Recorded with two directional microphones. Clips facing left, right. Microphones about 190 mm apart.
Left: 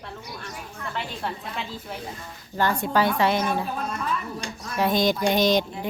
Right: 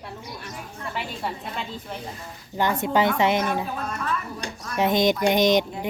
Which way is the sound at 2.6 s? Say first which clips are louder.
Right 1 dB; 20° right (ahead or behind).